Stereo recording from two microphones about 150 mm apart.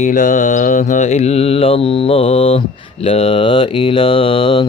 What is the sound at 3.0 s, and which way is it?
Speech, 40° left (ahead or behind).